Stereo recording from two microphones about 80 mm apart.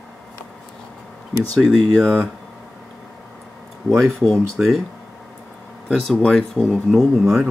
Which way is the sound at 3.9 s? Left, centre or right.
Left.